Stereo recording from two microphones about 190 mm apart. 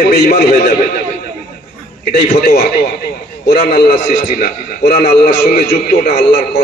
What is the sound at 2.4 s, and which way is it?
A man's voice, 55° left (ahead or behind).